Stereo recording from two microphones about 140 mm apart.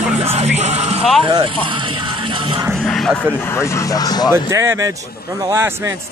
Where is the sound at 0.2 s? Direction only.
45° right (ahead or behind).